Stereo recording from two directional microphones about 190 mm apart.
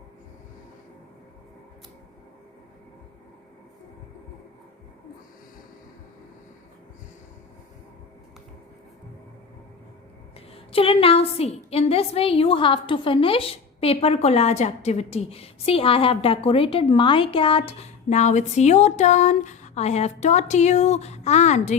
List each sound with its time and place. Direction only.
10.5 s a woman's voice: 30° left (ahead or behind)